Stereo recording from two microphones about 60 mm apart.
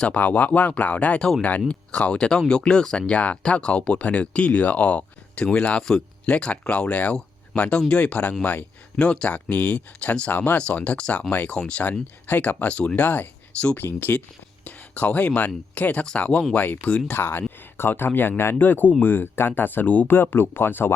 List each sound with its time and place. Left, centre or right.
0.0 s speech: left
11.3 s speech: left
11.5 s speech: centre
11.8 s speech: left
13.0 s speech: left
17.1 s speech: left
20.1 s speech: left